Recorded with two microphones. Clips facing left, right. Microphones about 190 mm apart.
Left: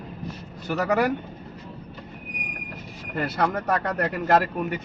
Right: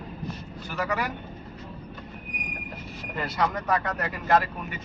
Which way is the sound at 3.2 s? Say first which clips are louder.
Left 3 dB; 55° left (ahead or behind).